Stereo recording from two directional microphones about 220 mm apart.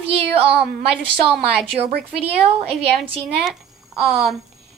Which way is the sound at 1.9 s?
45° right (ahead or behind).